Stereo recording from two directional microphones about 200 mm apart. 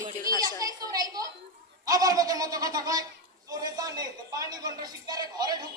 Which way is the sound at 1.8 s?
20° right (ahead or behind).